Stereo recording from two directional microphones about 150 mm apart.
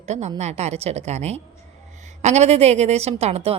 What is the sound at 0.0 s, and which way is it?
A woman's voice, 50° right (ahead or behind).